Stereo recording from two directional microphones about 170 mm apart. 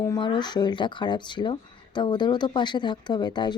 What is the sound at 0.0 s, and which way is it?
Speech, 25° left (ahead or behind).